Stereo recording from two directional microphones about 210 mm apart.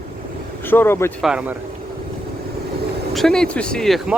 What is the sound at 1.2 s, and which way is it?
Speech, 5° right (ahead or behind).